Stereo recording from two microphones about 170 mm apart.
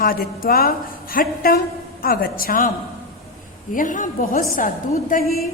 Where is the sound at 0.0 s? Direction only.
60° left (ahead or behind).